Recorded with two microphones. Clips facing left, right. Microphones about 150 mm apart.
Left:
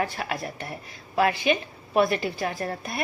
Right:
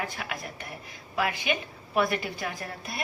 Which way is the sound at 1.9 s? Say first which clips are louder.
Left 4 dB; 25° left (ahead or behind).